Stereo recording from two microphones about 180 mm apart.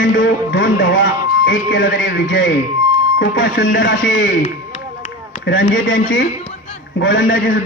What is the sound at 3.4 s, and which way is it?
A man's voice, 45° left (ahead or behind).